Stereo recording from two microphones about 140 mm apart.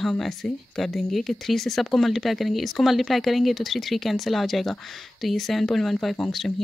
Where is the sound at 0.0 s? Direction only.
Centre (ahead or behind).